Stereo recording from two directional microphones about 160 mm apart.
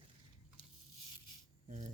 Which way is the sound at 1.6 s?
45° right (ahead or behind).